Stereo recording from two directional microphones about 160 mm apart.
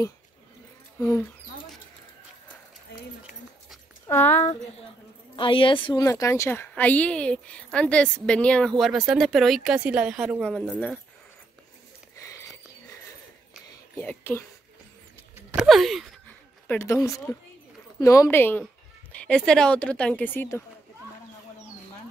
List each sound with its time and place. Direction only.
0.9 s speech: 20° left (ahead or behind)
4.1 s speech: 10° left (ahead or behind)
5.3 s a woman's voice: 35° left (ahead or behind)
6.0 s a woman's voice: 20° left (ahead or behind); by 11.0 s centre (ahead or behind)
12.2 s a sound: 20° left (ahead or behind)
13.9 s speech: 15° left (ahead or behind)
15.5 s speech: centre (ahead or behind)
16.3 s a sound: 10° left (ahead or behind)
17.9 s speech: 20° left (ahead or behind)